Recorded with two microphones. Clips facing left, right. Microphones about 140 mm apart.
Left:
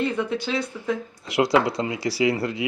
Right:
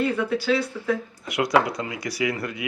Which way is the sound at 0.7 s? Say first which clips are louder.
Right 1 dB; 20° left (ahead or behind).